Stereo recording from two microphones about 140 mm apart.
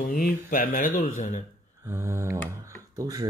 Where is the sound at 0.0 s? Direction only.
90° left; by 1.4 s 70° left (ahead or behind).